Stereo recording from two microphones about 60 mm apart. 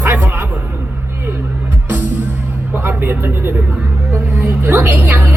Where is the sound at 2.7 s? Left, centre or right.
Right.